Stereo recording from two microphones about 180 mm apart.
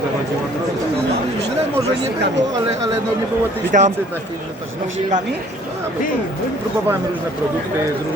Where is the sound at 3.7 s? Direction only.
45° right (ahead or behind).